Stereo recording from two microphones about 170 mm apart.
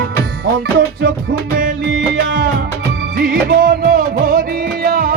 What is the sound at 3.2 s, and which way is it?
Music, 70° right (ahead or behind).